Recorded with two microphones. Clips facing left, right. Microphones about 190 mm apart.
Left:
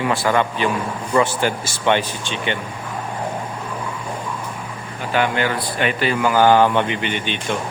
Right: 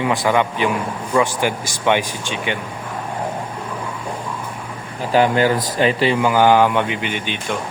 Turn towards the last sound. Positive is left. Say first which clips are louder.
# left 1 dB
turn(degrees=-5)  # may be behind; listen again after turning